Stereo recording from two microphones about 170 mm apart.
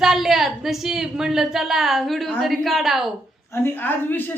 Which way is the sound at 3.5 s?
10° left (ahead or behind).